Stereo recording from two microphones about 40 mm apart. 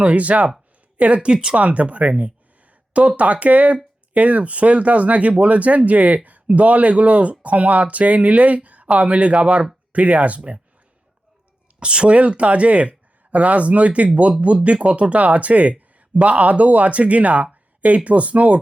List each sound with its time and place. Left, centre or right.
0.0 s speech: right
1.3 s speech: right
1.5 s speech: right
11.8 s speech: right